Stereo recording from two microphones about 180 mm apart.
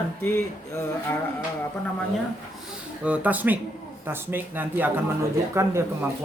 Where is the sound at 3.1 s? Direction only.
10° right (ahead or behind).